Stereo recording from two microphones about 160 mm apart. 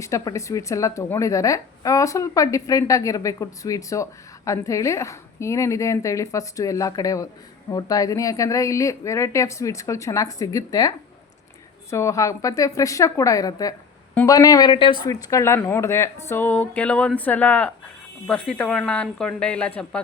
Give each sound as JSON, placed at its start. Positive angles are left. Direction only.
{"t": 0.0, "sound": "speech", "side_deg": 20}
{"t": 15.1, "sound": "speech", "side_deg": 20}